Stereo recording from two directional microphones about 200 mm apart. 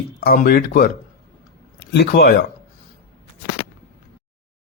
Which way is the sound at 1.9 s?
55° left (ahead or behind).